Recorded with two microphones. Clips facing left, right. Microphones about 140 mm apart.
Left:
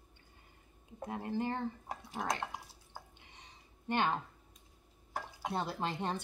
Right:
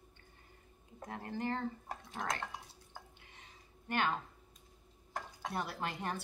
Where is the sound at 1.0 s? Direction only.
15° left (ahead or behind).